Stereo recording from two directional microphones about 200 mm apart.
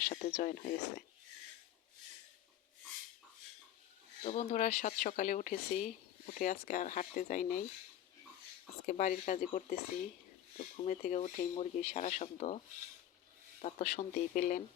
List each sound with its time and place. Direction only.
0.3 s speech: 50° left (ahead or behind)
4.2 s speech: 35° left (ahead or behind)
8.9 s speech: 35° left (ahead or behind)
13.8 s speech: 45° left (ahead or behind)